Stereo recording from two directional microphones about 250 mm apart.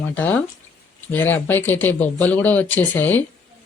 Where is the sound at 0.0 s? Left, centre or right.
Centre.